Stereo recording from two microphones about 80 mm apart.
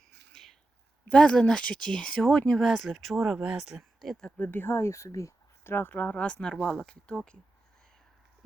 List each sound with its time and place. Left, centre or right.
0.3 s a sound: centre
1.0 s speech: centre
4.4 s speech: left
5.7 s speech: left